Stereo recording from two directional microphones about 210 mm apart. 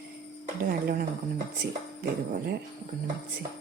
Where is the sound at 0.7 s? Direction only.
45° right (ahead or behind).